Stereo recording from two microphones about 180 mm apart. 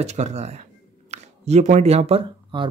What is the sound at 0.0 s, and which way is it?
Speech, 40° right (ahead or behind).